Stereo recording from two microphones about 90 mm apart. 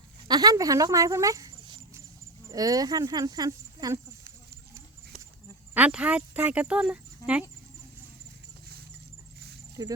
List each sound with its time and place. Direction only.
0.3 s speech: 45° right (ahead or behind)
5.7 s speech: 15° right (ahead or behind)
9.8 s speech: 45° right (ahead or behind)